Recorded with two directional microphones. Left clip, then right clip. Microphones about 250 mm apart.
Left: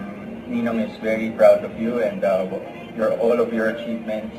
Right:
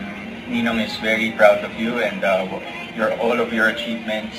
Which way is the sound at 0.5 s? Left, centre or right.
Centre.